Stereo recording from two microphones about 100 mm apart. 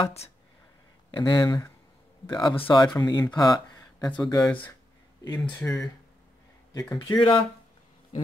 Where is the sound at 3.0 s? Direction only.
45° left (ahead or behind).